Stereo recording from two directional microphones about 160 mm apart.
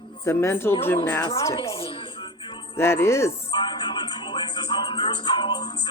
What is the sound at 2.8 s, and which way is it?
Speech, 15° left (ahead or behind).